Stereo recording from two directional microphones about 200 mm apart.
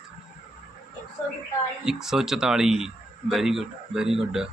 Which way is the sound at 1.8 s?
Centre (ahead or behind).